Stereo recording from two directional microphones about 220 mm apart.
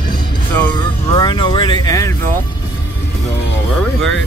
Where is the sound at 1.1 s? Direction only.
20° left (ahead or behind).